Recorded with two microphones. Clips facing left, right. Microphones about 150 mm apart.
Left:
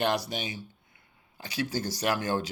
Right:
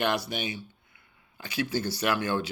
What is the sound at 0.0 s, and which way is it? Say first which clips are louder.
Speech: even; 35° left (ahead or behind).